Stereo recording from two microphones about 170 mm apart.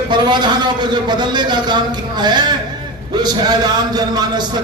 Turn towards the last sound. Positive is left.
turn(degrees=-25)  # may be behind; listen again after turning